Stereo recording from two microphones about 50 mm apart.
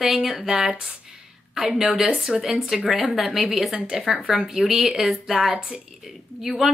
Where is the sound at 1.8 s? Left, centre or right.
Centre.